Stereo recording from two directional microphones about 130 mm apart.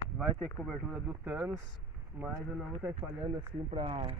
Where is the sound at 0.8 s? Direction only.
10° right (ahead or behind).